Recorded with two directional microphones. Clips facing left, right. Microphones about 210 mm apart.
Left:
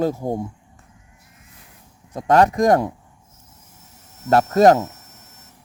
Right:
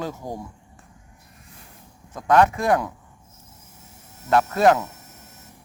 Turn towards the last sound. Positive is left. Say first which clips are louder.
# left 4 dB
turn(degrees=40)  # may be behind; listen again after turning